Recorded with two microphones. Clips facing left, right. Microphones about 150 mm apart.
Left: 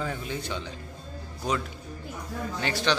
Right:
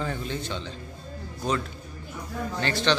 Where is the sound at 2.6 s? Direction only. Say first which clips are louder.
Right 2 dB; 10° left (ahead or behind).